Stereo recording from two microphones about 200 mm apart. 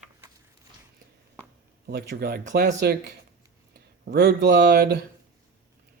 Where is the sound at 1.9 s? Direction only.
55° right (ahead or behind).